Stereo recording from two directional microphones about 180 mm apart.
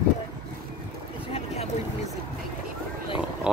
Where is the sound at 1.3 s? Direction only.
35° left (ahead or behind).